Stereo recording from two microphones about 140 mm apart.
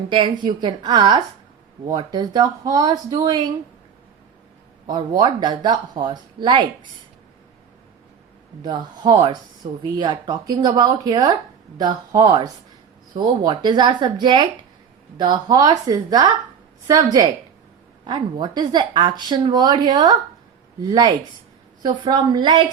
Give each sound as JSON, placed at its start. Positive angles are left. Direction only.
{"t": 0.1, "sound": "speech", "side_deg": -35}
{"t": 4.9, "sound": "speech", "side_deg": -30}
{"t": 8.6, "sound": "speech", "side_deg": -30}